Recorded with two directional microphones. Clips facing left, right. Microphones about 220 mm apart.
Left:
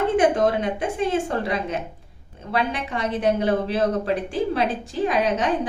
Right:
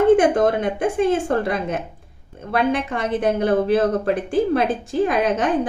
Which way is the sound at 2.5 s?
50° right (ahead or behind).